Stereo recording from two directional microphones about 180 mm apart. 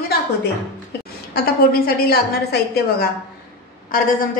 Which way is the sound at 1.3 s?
55° left (ahead or behind).